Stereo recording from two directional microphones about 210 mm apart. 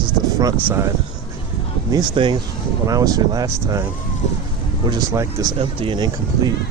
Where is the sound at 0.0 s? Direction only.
15° right (ahead or behind).